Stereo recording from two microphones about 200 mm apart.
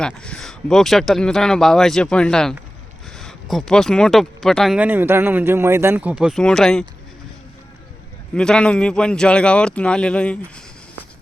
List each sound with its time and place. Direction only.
0.0 s speech: 5° left (ahead or behind)
8.4 s speech: 5° left (ahead or behind)